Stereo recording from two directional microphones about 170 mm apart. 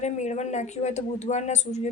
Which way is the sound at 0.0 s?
45° left (ahead or behind).